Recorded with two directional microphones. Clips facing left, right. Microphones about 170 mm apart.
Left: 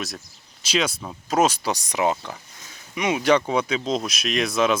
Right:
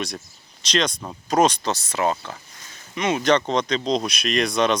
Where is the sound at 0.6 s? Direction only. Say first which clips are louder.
Right 1 dB; 5° left (ahead or behind).